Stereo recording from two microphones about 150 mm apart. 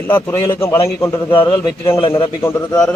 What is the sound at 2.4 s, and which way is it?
Speech, 15° left (ahead or behind).